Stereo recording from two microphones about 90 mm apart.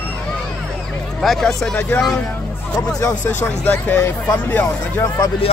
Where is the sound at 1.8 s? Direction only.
15° left (ahead or behind).